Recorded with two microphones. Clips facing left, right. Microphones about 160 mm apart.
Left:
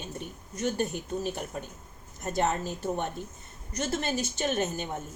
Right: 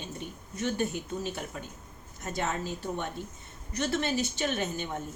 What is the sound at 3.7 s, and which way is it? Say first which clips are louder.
A woman's voice: right 1 dB; 40° left (ahead or behind).